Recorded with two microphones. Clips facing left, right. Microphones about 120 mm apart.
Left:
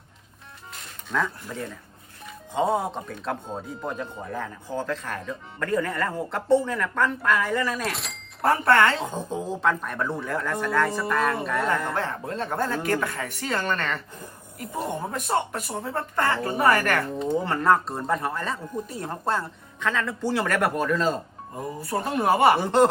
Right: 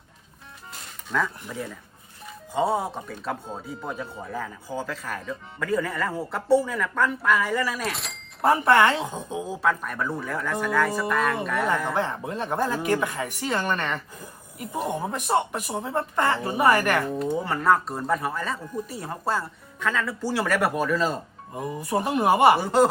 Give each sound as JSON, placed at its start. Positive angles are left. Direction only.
{"t": 1.1, "sound": "speech", "side_deg": 0}
{"t": 8.7, "sound": "speech", "side_deg": -15}
{"t": 9.0, "sound": "speech", "side_deg": 0}
{"t": 21.8, "sound": "speech", "side_deg": -15}